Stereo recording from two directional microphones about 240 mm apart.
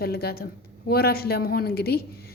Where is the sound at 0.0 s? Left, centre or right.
Left.